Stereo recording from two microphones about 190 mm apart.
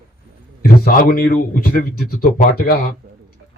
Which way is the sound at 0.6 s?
50° left (ahead or behind).